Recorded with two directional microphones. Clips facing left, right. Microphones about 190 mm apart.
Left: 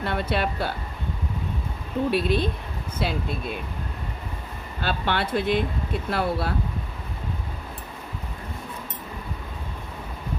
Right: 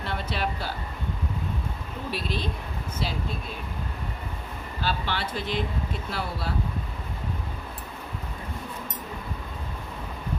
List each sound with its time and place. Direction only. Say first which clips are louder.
0.0 s speech: left 5 dB; 60° left (ahead or behind)
2.0 s speech: left 7 dB; 60° left (ahead or behind)
4.8 s speech: left 4 dB; 60° left (ahead or behind)